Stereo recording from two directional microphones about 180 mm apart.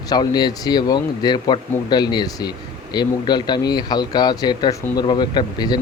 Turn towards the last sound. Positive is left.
turn(degrees=25)  # may be behind; listen again after turning